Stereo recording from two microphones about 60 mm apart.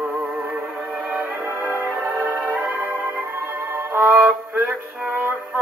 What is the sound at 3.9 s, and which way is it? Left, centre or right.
Music, right.